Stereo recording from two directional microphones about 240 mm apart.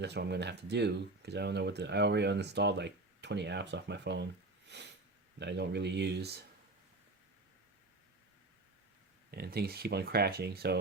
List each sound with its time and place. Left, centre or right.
0.0 s speech: right
9.3 s speech: right